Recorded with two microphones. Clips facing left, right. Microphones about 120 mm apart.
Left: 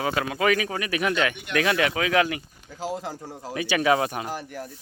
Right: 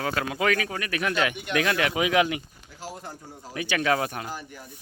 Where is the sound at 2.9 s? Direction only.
90° left.